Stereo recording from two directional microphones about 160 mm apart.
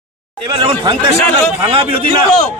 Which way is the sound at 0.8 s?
30° right (ahead or behind).